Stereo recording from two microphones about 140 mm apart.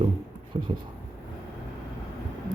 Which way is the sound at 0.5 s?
40° right (ahead or behind).